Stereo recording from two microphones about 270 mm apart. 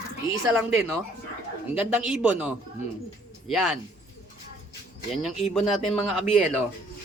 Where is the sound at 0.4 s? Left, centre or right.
Centre.